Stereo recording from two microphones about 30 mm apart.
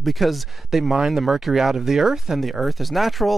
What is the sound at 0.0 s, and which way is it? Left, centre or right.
Speech, centre.